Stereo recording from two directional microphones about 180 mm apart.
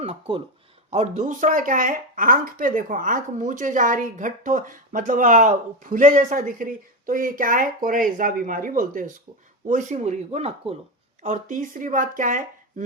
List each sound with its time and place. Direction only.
0.0 s a woman's voice: 30° right (ahead or behind); by 12.8 s 50° right (ahead or behind)